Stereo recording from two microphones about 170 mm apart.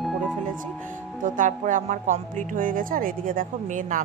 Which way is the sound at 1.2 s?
50° right (ahead or behind).